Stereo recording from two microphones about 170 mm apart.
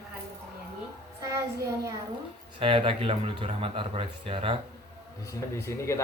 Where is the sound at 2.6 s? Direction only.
30° right (ahead or behind).